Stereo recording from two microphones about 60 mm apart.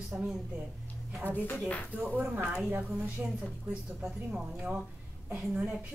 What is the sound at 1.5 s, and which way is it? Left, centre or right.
Speech, centre.